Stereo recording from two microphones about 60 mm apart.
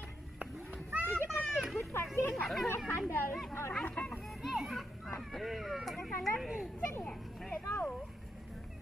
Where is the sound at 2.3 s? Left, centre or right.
Centre.